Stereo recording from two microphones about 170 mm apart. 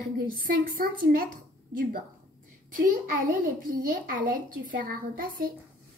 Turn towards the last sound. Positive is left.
turn(degrees=-55)  # may be behind; listen again after turning